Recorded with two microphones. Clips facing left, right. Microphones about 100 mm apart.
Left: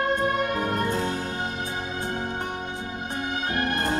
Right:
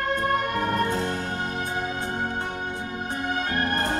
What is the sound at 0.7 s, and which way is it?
Music, 50° left (ahead or behind).